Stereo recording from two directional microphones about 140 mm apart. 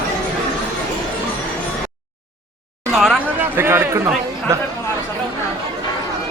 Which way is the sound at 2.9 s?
Centre (ahead or behind).